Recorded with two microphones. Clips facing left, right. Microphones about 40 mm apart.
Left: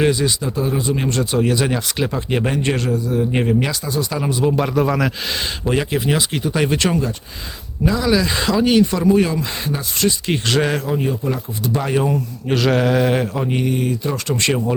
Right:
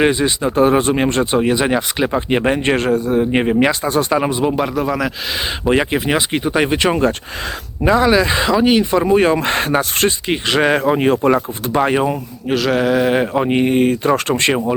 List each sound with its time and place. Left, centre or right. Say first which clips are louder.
0.0 s speech: right 3 dB; right
0.5 s speech: right 7 dB; right
1.0 s speech: right 3 dB; right
4.5 s mantra: even; centre
5.6 s speech: right 4 dB; right
7.9 s speech: right 5 dB; right
9.4 s speech: right 8 dB; right
10.2 s speech: right 3 dB; right
11.0 s speech: right 8 dB; right
11.6 s speech: even; right
12.5 s mantra: right 1 dB; centre
13.1 s speech: right 5 dB; right